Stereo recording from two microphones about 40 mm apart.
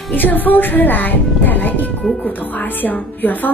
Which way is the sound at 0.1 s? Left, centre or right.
Left.